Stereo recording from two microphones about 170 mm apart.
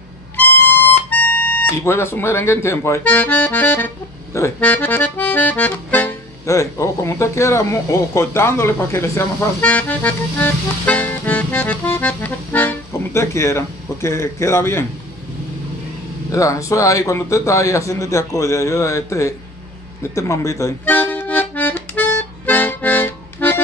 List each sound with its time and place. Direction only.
0.7 s speech: 10° left (ahead or behind)
16.3 s a man's voice: 20° left (ahead or behind)
20.0 s accordion: 15° left (ahead or behind)